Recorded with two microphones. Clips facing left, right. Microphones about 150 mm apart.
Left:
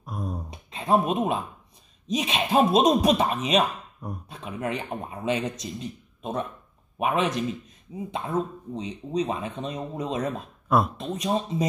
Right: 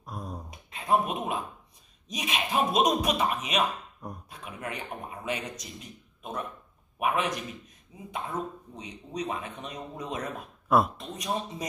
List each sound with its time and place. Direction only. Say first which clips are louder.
0.0 s a sound: left 5 dB; 5° left (ahead or behind)
0.5 s music: left 3 dB; 25° left (ahead or behind)
2.0 s a man's voice: left 6 dB; 30° left (ahead or behind)